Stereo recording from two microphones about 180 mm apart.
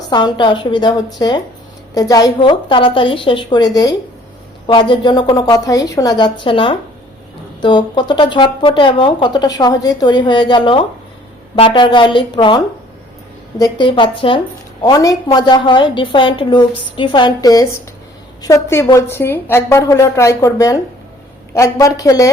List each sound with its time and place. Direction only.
0.1 s a woman's voice: 25° left (ahead or behind)